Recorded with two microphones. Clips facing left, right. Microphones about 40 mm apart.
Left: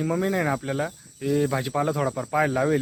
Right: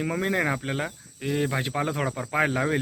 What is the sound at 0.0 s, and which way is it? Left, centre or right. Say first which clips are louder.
Speech: left 1 dB; right.